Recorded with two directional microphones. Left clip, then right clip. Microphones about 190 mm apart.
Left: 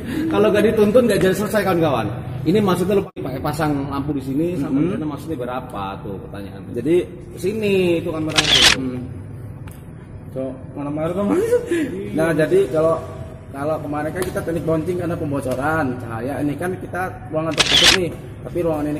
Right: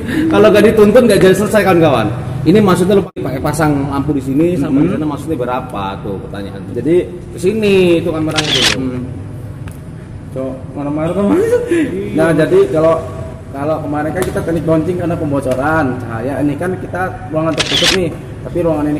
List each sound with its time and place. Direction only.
0.1 s a man's voice: 5° right (ahead or behind)
7.4 s a man's voice: 5° right (ahead or behind)
11.0 s speech: 25° left (ahead or behind)
11.7 s a man's voice: 15° left (ahead or behind)
17.5 s a man's voice: centre (ahead or behind)
18.6 s speech: 30° left (ahead or behind)